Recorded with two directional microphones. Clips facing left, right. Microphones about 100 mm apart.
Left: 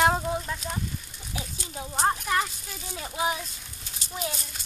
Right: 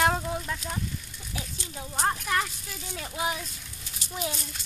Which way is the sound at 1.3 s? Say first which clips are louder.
Left 2 dB; 20° left (ahead or behind).